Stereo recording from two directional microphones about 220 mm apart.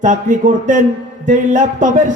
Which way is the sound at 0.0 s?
35° right (ahead or behind).